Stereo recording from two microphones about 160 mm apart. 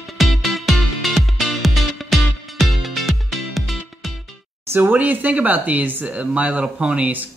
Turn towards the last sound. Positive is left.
turn(degrees=-10)  # may be behind; listen again after turning